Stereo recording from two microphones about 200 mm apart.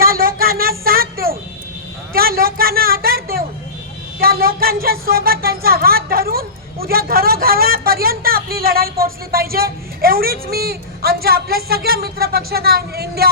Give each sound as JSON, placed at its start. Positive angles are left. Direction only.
{"t": 0.0, "sound": "child singing", "side_deg": -45}
{"t": 2.1, "sound": "a sound", "side_deg": -50}
{"t": 4.2, "sound": "speech", "side_deg": -50}